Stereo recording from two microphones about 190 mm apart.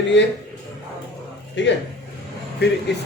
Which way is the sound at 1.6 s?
70° left (ahead or behind).